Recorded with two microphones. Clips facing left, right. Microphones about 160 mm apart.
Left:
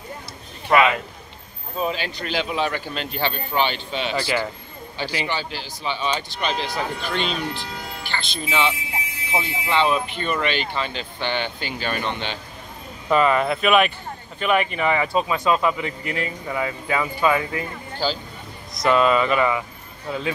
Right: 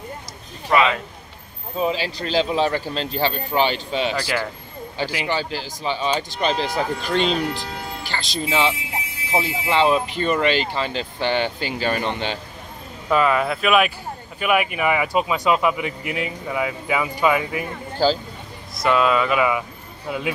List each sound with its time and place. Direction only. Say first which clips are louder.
0.7 s a man's voice: left 1 dB; 5° left (ahead or behind)
1.8 s speech: right 3 dB; 30° right (ahead or behind)
4.1 s speech: left 1 dB; 5° right (ahead or behind)
5.3 s speech: right 4 dB; 40° right (ahead or behind)
13.1 s speech: even; centre (ahead or behind)
18.0 s speech: right 6 dB; 40° right (ahead or behind)
18.8 s speech: left 1 dB; centre (ahead or behind)